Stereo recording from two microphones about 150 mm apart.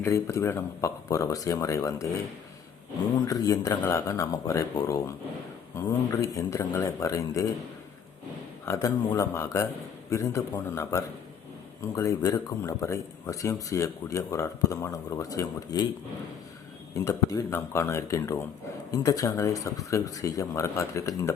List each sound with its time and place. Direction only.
0.0 s speech: 20° left (ahead or behind)
3.2 s speech: 25° left (ahead or behind)
8.6 s speech: 20° left (ahead or behind)
17.0 s speech: 20° left (ahead or behind)